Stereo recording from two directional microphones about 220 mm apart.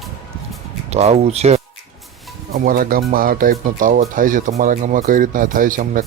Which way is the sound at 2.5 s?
40° right (ahead or behind).